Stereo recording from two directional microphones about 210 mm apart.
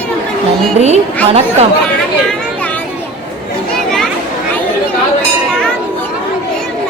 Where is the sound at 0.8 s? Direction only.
30° right (ahead or behind).